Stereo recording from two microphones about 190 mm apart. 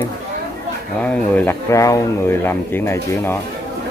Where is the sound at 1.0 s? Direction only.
5° left (ahead or behind).